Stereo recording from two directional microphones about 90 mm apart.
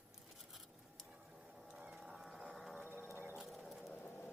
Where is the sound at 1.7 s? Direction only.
10° right (ahead or behind).